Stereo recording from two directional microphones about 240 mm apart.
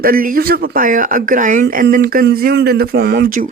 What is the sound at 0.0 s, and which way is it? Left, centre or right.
Speech, right.